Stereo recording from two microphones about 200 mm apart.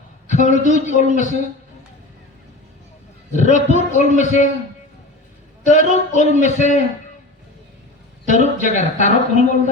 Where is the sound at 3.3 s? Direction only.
35° left (ahead or behind).